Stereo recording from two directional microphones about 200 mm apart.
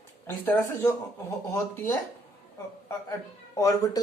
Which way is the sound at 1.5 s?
15° left (ahead or behind).